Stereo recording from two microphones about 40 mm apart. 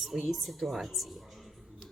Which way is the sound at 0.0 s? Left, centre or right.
Centre.